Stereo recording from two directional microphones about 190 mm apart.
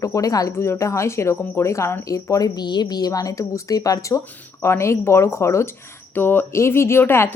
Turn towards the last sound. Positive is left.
turn(degrees=10)  # may be behind; listen again after turning